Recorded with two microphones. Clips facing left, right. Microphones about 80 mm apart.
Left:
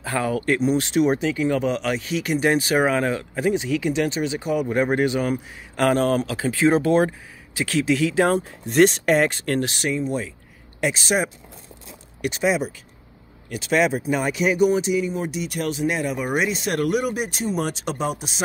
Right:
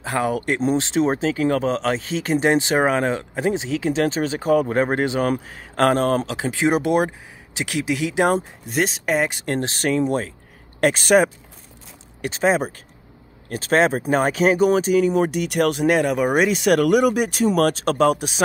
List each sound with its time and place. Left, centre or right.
0.0 s speech: right
1.4 s speech: right
1.7 s speech: right
5.2 s speech: right
5.8 s speech: right
6.3 s speech: right
8.6 s speech: centre
9.4 s speech: right
9.9 s speech: right
10.8 s speech: right
12.2 s speech: right
15.0 s speech: right